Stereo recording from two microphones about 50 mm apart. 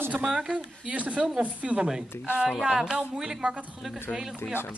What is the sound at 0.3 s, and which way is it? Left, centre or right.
Speech, centre.